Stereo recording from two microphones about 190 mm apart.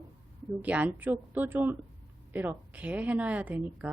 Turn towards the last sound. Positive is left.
turn(degrees=-10)  # may be behind; listen again after turning